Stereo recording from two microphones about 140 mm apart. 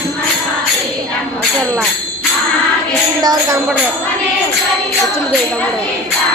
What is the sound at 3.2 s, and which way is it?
Jingle bell, 30° right (ahead or behind).